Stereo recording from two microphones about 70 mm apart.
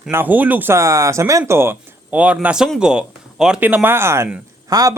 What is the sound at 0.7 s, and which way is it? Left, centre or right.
Speech, right.